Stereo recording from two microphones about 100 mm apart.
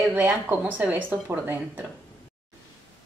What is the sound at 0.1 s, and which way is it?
Speech, 15° right (ahead or behind).